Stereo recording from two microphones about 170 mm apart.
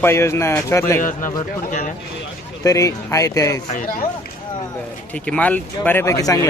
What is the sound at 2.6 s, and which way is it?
Speech, 20° left (ahead or behind).